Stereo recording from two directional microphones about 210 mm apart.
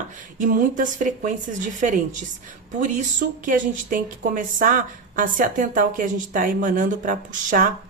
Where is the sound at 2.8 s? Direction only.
35° right (ahead or behind).